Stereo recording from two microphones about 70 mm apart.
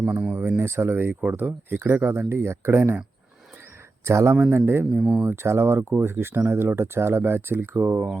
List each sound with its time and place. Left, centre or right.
0.0 s speech: centre
0.4 s speech: right
1.2 s speech: right
1.7 s speech: right
4.0 s speech: right
4.9 s speech: centre
5.2 s speech: right